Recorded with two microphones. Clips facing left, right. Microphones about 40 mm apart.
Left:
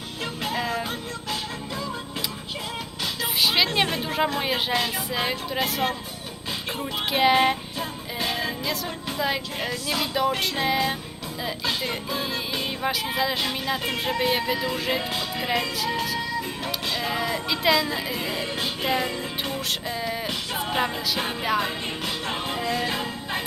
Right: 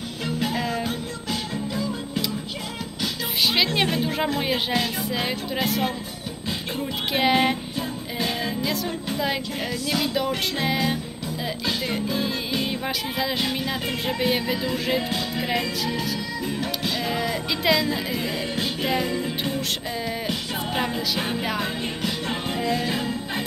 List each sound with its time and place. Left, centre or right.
0.3 s music: centre
3.4 s music: centre
16.8 s speech: centre
20.7 s music: centre